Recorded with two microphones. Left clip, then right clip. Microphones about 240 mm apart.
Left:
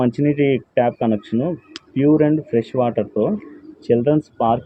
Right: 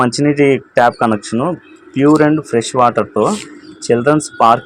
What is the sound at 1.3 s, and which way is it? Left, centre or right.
Speech, right.